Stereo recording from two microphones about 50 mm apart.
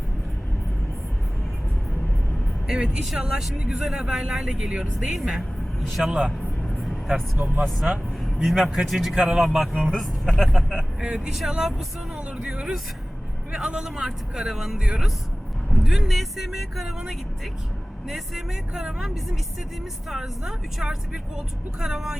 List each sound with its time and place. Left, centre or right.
2.6 s a man's voice: centre
3.6 s speech: centre
6.1 s speech: right
7.3 s speech: right
8.2 s a man's voice: centre
10.0 s speech: centre
11.0 s speech: centre